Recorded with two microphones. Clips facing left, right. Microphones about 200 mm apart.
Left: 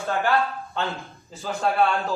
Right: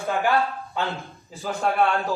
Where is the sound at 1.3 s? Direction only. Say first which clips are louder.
Even; 10° right (ahead or behind).